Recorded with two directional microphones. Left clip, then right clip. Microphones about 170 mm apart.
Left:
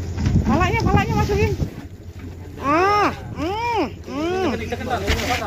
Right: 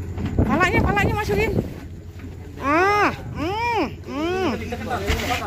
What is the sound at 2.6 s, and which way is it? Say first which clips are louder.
Vehicle: left 1 dB; 20° right (ahead or behind).